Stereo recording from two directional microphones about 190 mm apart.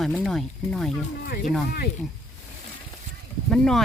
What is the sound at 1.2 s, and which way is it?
Speech, 50° left (ahead or behind).